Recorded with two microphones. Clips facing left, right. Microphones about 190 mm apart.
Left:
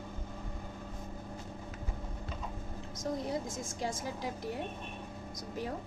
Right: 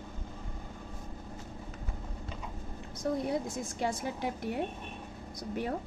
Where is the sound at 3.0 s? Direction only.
65° right (ahead or behind).